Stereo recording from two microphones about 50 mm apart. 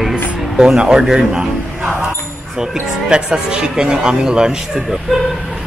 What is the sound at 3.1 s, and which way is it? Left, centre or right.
Speech, centre.